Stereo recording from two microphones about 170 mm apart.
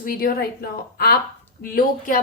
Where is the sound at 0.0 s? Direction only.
55° left (ahead or behind).